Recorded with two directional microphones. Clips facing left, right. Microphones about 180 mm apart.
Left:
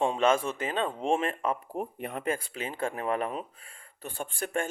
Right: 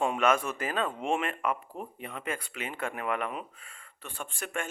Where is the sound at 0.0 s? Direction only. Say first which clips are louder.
Left 2 dB; 25° left (ahead or behind).